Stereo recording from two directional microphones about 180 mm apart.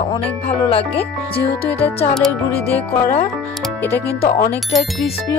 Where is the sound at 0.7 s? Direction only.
30° left (ahead or behind).